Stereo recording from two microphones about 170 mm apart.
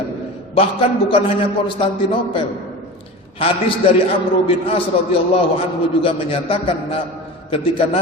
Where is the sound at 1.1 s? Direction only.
30° left (ahead or behind).